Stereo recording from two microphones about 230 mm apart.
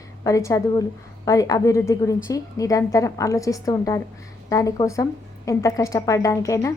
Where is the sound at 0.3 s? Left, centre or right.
Centre.